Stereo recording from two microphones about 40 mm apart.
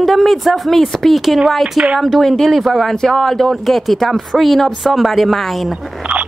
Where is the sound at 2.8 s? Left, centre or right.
Centre.